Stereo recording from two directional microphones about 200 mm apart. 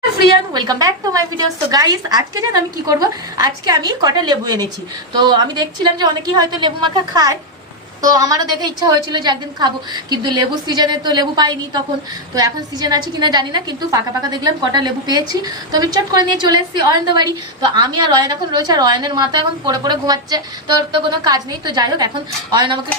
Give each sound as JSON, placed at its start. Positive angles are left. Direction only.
{"t": 0.5, "sound": "a woman's voice", "side_deg": -20}